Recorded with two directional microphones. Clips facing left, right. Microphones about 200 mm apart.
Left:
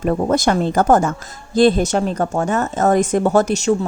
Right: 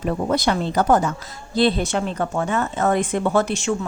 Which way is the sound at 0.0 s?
50° left (ahead or behind).